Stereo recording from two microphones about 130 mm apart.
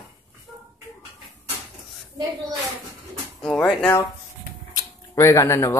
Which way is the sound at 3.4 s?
5° left (ahead or behind).